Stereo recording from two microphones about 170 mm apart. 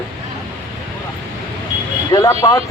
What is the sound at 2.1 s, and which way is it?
Speech, 20° left (ahead or behind).